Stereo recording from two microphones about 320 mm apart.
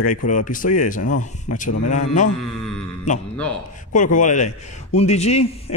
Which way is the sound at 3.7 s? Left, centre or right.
Left.